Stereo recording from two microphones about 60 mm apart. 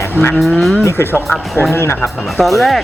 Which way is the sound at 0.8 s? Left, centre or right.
Left.